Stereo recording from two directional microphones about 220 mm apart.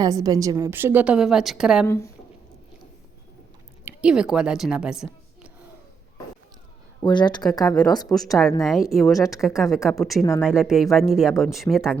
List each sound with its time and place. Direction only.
0.0 s a woman's voice: 15° right (ahead or behind)
1.9 s speech: 15° left (ahead or behind)
3.8 s a woman's voice: 5° right (ahead or behind)
7.0 s speech: 20° left (ahead or behind)
8.6 s speech: centre (ahead or behind)